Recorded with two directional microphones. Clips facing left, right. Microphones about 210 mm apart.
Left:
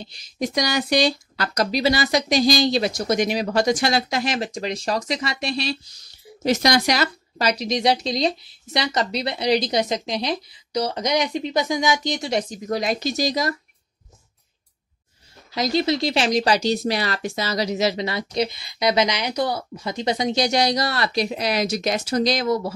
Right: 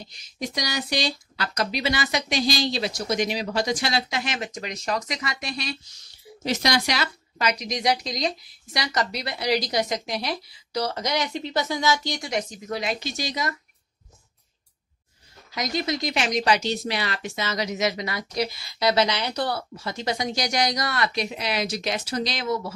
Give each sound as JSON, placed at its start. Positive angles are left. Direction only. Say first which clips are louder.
{"t": 0.0, "sound": "speech", "louder": "left 6 dB", "side_deg": 35}
{"t": 0.6, "sound": "speech", "louder": "left 7 dB", "side_deg": 55}
{"t": 6.4, "sound": "speech", "louder": "left 5 dB", "side_deg": 45}
{"t": 15.5, "sound": "speech", "louder": "left 6 dB", "side_deg": 30}